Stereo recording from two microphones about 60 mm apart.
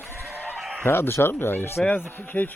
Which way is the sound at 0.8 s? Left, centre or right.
Left.